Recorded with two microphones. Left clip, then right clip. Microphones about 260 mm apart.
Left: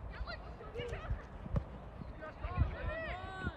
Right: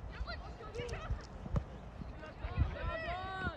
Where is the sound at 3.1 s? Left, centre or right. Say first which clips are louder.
Right 4 dB; right.